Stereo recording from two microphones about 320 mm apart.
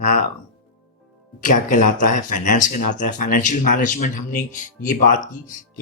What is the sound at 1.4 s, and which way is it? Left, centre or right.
Speech, left.